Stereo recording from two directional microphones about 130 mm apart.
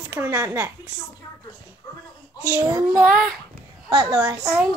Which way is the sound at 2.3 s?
20° right (ahead or behind).